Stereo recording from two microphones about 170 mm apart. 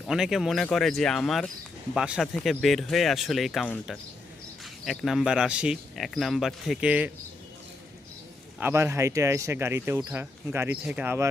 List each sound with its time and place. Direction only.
0.0 s speech: 5° right (ahead or behind)
8.5 s speech: 15° right (ahead or behind)